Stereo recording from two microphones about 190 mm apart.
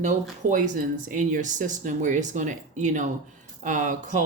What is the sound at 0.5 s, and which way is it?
Speech, 45° right (ahead or behind).